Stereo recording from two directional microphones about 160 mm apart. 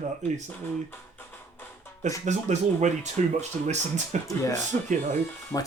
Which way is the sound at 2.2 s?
45° right (ahead or behind).